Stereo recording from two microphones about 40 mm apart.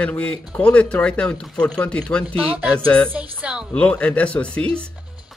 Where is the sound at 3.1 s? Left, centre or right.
Right.